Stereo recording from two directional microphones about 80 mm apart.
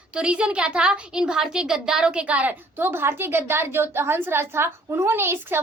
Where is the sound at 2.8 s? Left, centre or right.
Right.